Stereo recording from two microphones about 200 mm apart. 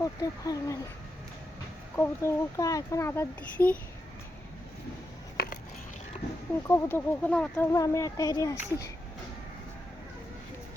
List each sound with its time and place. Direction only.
0.0 s speech: 15° left (ahead or behind)
2.0 s speech: 15° left (ahead or behind)
6.6 s speech: 10° left (ahead or behind)